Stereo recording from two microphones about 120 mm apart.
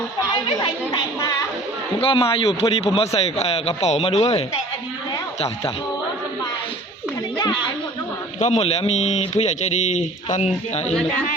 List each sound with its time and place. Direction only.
0.9 s speech: 30° left (ahead or behind)
2.0 s a man's voice: 50° left (ahead or behind)
8.4 s a man's voice: 65° left (ahead or behind)